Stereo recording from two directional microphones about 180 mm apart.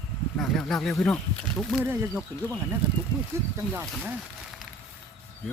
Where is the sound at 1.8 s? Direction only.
10° right (ahead or behind).